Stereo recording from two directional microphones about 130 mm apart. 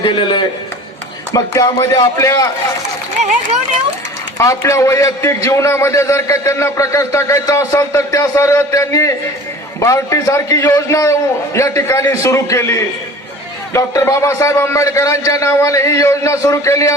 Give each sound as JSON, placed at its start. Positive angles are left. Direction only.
{"t": 0.0, "sound": "a man's voice", "side_deg": 40}
{"t": 1.3, "sound": "a man's voice", "side_deg": 25}
{"t": 4.4, "sound": "a man's voice", "side_deg": 25}